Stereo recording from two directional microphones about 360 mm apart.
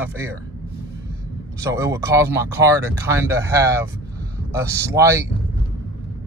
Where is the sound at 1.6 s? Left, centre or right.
Centre.